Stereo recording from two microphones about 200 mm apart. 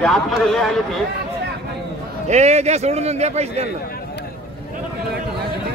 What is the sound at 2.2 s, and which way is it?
A man's voice, 35° right (ahead or behind).